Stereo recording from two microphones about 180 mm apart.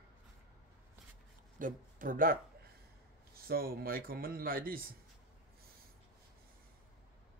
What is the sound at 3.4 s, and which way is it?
Speech, 55° right (ahead or behind).